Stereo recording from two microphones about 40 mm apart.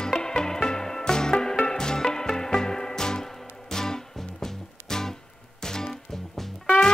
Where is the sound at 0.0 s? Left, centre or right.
Centre.